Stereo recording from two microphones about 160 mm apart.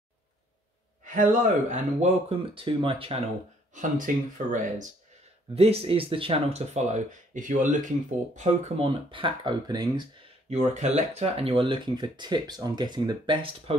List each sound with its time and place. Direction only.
1.0 s speech: 55° right (ahead or behind)
2.2 s speech: 35° right (ahead or behind)
3.7 s speech: 55° right (ahead or behind)
5.5 s speech: 40° right (ahead or behind)
8.8 s speech: 30° right (ahead or behind)
10.5 s speech: 45° right (ahead or behind)